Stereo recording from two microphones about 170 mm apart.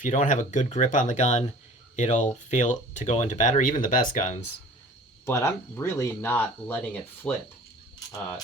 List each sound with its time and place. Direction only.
0.0 s speech: 45° left (ahead or behind)
5.2 s speech: 15° left (ahead or behind)